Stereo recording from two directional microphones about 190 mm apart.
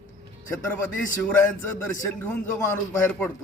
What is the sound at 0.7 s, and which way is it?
A man's voice, 10° left (ahead or behind).